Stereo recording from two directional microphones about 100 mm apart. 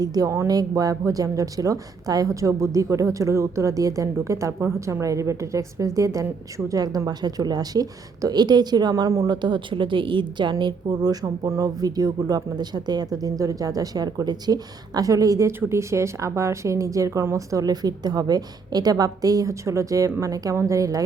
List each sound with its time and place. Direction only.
0.0 s a woman's voice: 35° right (ahead or behind)
9.2 s a woman's voice: 50° right (ahead or behind); by 21.0 s 35° right (ahead or behind)